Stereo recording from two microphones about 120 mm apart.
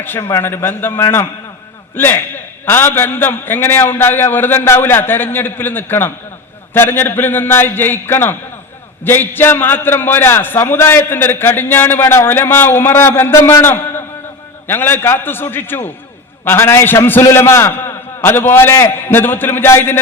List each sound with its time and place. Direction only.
0.0 s a man's voice: 20° left (ahead or behind)